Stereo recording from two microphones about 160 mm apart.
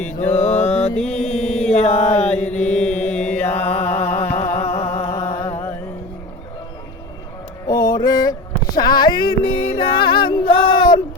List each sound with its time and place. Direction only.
0.3 s mantra: 40° left (ahead or behind)
0.9 s mantra: 5° left (ahead or behind)
1.7 s mantra: 45° left (ahead or behind)
2.3 s mantra: 10° left (ahead or behind)
3.8 s a sound: 15° left (ahead or behind)
4.6 s music: 40° left (ahead or behind)
5.4 s mantra: 15° left (ahead or behind)
7.7 s a sound: 25° left (ahead or behind)